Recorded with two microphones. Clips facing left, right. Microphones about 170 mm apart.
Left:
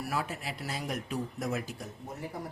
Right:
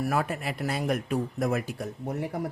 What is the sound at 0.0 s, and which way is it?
Speech, 55° right (ahead or behind).